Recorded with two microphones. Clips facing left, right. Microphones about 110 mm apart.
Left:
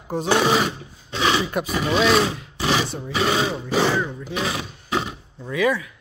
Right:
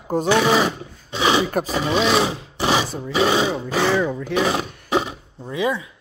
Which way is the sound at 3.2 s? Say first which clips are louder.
Right 3 dB; 25° right (ahead or behind).